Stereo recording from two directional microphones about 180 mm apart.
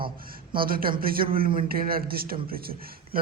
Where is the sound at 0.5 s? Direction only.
55° right (ahead or behind).